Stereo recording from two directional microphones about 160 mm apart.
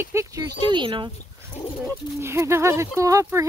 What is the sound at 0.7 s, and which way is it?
Speech, 30° right (ahead or behind).